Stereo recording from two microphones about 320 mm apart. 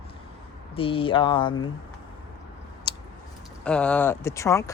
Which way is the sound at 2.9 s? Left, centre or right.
Centre.